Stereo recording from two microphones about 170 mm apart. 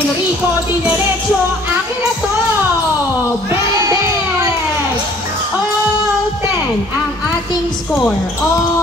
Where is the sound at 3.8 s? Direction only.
20° right (ahead or behind).